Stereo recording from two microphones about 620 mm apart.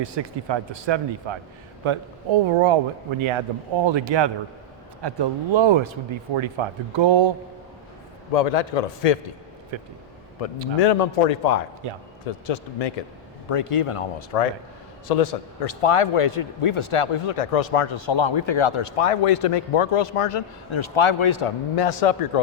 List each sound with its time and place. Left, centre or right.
0.0 s speech: right
8.3 s a man's voice: left
9.7 s speech: right
10.4 s a man's voice: left
11.8 s speech: right
13.5 s a man's voice: left
15.0 s a man's voice: left